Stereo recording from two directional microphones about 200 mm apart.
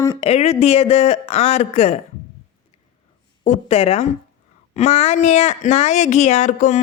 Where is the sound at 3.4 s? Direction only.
35° left (ahead or behind).